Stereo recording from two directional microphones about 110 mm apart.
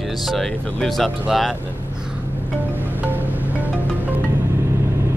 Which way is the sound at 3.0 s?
15° right (ahead or behind).